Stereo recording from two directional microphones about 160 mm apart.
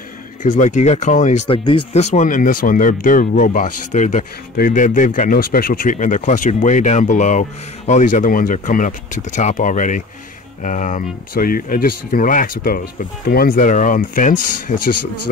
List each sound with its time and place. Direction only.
0.4 s speech: 50° left (ahead or behind)
1.5 s speech: 30° left (ahead or behind)
2.0 s speech: 45° left (ahead or behind)